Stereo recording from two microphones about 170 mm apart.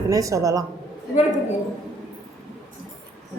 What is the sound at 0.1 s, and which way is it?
Speech, 20° right (ahead or behind).